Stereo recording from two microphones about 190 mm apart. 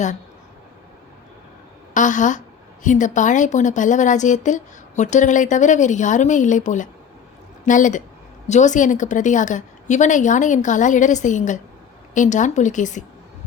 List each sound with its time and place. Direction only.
1.9 s speech: 40° left (ahead or behind)